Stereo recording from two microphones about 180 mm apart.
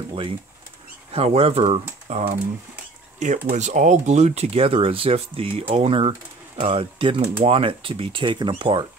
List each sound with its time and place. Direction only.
0.1 s speech: 30° right (ahead or behind)
3.4 s speech: 40° right (ahead or behind)